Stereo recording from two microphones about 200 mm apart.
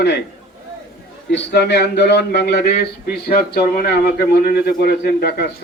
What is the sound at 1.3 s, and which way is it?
Speech, 60° left (ahead or behind).